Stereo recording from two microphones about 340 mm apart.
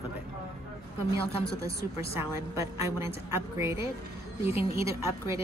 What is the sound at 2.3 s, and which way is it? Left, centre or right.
A woman's voice, centre.